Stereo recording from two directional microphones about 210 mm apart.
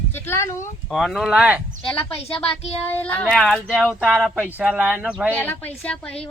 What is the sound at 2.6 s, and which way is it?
Child singing, 30° left (ahead or behind).